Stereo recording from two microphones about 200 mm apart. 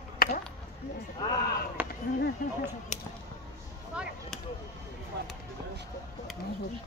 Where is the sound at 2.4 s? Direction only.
45° left (ahead or behind).